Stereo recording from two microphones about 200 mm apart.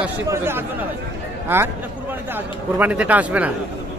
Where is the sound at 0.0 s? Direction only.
10° right (ahead or behind).